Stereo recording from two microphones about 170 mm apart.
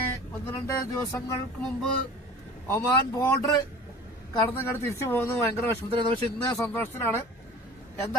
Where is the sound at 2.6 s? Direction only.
15° left (ahead or behind).